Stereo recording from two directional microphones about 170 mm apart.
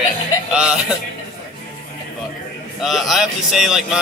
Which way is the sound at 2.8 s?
Centre (ahead or behind).